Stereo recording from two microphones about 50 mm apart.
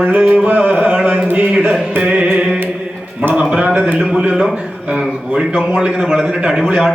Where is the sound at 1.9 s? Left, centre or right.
Right.